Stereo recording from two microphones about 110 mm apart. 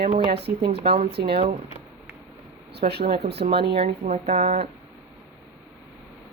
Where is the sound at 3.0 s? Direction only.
60° right (ahead or behind); by 4.6 s 85° right.